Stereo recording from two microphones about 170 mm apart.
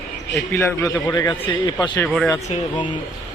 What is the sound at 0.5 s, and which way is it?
A man's voice, 15° left (ahead or behind).